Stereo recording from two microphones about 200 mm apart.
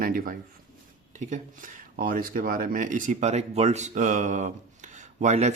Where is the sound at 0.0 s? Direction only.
45° right (ahead or behind).